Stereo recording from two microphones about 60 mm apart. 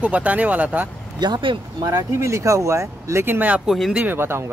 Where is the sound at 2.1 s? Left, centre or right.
Right.